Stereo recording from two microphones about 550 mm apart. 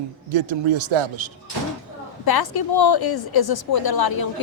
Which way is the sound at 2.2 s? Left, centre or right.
Left.